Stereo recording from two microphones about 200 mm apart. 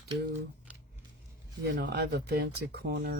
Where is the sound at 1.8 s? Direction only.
50° right (ahead or behind).